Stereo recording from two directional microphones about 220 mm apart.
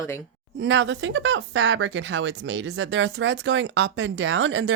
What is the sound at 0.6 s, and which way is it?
Speech, 55° right (ahead or behind).